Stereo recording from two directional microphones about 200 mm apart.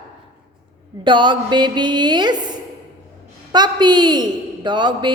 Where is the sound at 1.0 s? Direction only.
25° right (ahead or behind).